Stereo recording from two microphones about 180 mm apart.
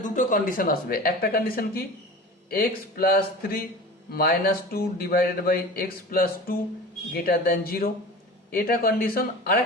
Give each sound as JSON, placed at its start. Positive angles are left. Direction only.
{"t": 0.0, "sound": "a man's voice", "side_deg": 45}